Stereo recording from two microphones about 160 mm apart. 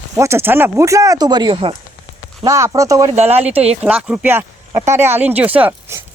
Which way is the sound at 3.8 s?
5° right (ahead or behind).